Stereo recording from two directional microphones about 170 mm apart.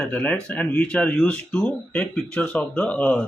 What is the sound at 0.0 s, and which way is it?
Speech, 10° left (ahead or behind).